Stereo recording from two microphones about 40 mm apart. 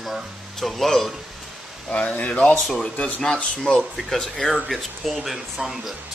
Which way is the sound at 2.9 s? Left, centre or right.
Left.